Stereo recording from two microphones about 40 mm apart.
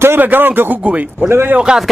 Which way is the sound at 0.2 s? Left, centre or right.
Right.